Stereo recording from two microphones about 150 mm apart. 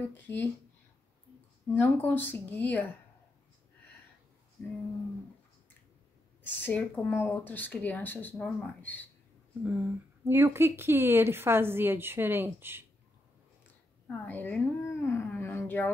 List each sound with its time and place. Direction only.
0.1 s speech: 15° left (ahead or behind)
1.8 s speech: 15° left (ahead or behind)
4.6 s a sound: 10° left (ahead or behind)
6.4 s speech: 10° left (ahead or behind)
9.6 s speech: 10° right (ahead or behind)
14.0 s speech: 10° left (ahead or behind)